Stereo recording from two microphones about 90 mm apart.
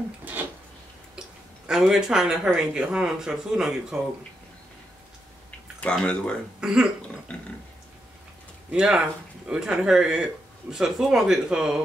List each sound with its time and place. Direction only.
0.2 s a sound: 20° right (ahead or behind)
1.7 s speech: 5° right (ahead or behind)
5.8 s speech: 15° left (ahead or behind)
6.6 s speech: 5° right (ahead or behind)
7.3 s speech: 10° left (ahead or behind)
8.7 s speech: 10° right (ahead or behind)